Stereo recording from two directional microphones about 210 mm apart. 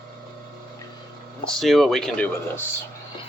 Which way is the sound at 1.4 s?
Centre (ahead or behind).